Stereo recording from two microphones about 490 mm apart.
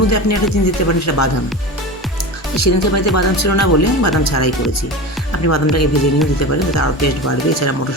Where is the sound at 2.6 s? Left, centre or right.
Left.